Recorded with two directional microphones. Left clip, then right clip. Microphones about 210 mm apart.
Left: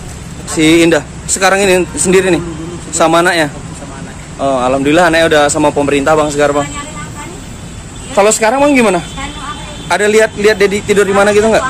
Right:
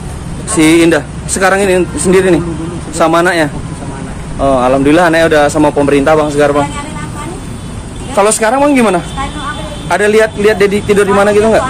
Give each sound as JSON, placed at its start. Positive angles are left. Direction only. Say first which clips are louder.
{"t": 0.5, "sound": "a man's voice", "louder": "right 1 dB", "side_deg": 0}
{"t": 8.2, "sound": "a man's voice", "louder": "even", "side_deg": 5}